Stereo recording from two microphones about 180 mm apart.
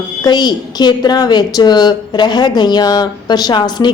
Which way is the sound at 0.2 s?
25° left (ahead or behind).